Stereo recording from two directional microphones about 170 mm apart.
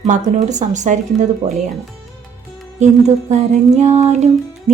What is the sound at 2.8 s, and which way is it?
Music, 40° right (ahead or behind).